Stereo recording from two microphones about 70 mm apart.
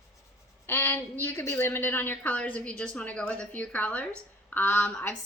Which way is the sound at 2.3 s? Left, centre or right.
Centre.